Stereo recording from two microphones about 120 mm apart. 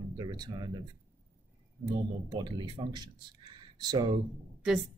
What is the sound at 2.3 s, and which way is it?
Speech, 40° right (ahead or behind).